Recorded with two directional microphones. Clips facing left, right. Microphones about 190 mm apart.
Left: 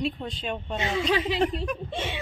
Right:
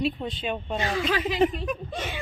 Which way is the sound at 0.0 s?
Centre (ahead or behind).